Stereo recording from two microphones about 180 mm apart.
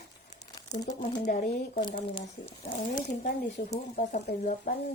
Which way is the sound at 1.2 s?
50° left (ahead or behind).